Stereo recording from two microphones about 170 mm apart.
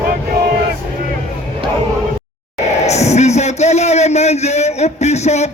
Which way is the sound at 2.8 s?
40° left (ahead or behind).